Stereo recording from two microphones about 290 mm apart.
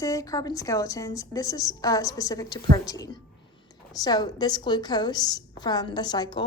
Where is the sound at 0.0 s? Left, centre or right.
Centre.